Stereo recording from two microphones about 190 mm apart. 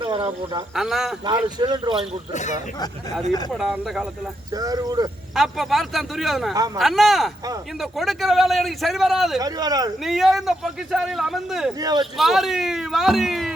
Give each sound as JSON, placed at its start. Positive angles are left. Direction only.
{"t": 0.0, "sound": "a sound", "side_deg": -25}
{"t": 0.8, "sound": "speech", "side_deg": 0}
{"t": 1.2, "sound": "speech", "side_deg": -25}
{"t": 2.3, "sound": "speech", "side_deg": 40}
{"t": 3.5, "sound": "speech", "side_deg": 0}
{"t": 4.5, "sound": "speech", "side_deg": -20}
{"t": 5.3, "sound": "speech", "side_deg": 0}
{"t": 9.4, "sound": "speech", "side_deg": -20}
{"t": 10.0, "sound": "speech", "side_deg": 0}
{"t": 11.8, "sound": "speech", "side_deg": -20}
{"t": 12.1, "sound": "speech", "side_deg": 0}